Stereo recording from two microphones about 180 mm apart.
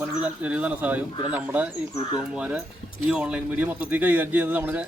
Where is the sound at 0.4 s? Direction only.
10° right (ahead or behind).